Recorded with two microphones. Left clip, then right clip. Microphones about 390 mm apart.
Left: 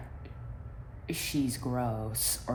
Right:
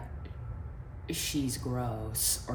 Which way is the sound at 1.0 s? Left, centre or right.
Centre.